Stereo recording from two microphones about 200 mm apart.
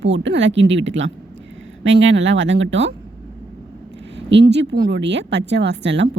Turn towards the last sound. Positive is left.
turn(degrees=-60)  # may be behind; listen again after turning